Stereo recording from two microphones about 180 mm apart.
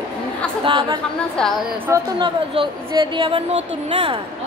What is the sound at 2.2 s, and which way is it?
A woman's voice, 25° right (ahead or behind).